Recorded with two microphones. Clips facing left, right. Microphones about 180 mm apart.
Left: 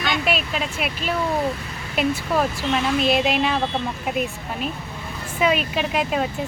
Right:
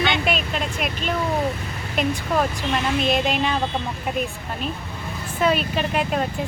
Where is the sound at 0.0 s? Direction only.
Centre (ahead or behind).